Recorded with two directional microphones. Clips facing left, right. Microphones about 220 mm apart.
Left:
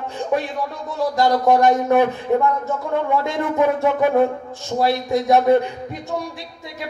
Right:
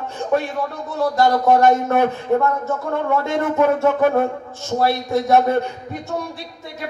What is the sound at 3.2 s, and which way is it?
Speech, 15° left (ahead or behind).